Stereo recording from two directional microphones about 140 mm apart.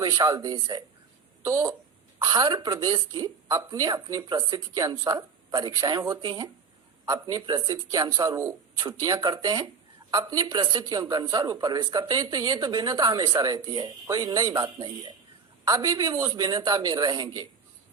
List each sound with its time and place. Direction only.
0.0 s a woman's voice: 30° right (ahead or behind)